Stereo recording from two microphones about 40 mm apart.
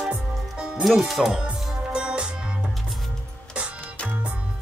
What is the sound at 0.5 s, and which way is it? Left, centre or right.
Music, right.